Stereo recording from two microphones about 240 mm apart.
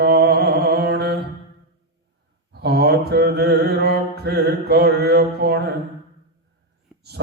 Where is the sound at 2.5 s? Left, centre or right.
Right.